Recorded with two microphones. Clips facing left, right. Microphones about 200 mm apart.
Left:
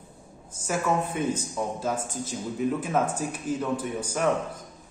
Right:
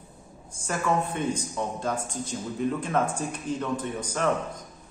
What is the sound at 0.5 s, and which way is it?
A man's voice, 5° left (ahead or behind).